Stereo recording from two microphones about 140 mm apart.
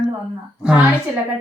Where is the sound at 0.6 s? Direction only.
10° right (ahead or behind).